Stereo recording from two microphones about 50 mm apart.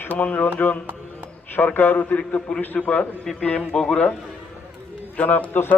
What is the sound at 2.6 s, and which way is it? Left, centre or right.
Speech, left.